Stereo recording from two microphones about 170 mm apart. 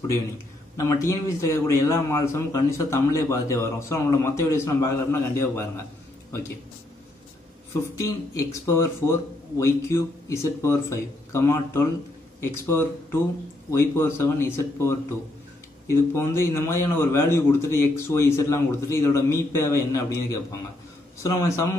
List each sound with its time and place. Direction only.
0.7 s a man's voice: 20° left (ahead or behind)
7.9 s a man's voice: 20° left (ahead or behind)